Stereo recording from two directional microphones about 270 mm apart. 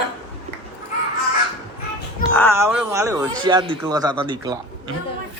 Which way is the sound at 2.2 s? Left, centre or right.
Left.